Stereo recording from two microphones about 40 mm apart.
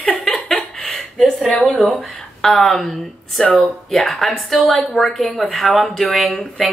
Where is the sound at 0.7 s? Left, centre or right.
Centre.